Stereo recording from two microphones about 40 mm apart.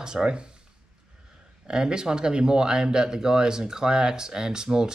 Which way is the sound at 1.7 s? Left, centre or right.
Centre.